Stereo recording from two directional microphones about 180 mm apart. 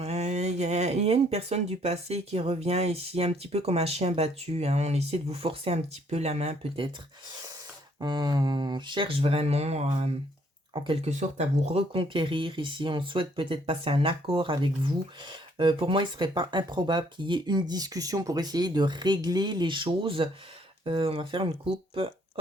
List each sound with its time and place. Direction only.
0.0 s speech: 35° right (ahead or behind)
7.9 s speech: 25° right (ahead or behind)
11.1 s speech: 40° right (ahead or behind)